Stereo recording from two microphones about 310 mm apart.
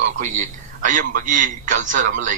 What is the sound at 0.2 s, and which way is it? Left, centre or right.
A man's voice, right.